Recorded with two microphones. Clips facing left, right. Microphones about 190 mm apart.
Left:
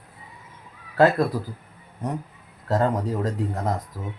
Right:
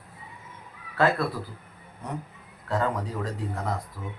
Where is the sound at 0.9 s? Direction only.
40° left (ahead or behind).